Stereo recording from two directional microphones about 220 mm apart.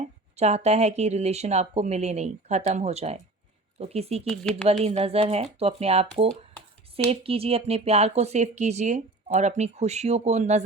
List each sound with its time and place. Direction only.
0.0 s speech: 30° right (ahead or behind)
4.3 s speech: 5° left (ahead or behind)
4.7 s speech: 30° right (ahead or behind)